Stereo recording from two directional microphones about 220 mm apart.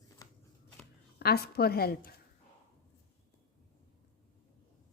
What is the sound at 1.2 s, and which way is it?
Speech, 45° left (ahead or behind).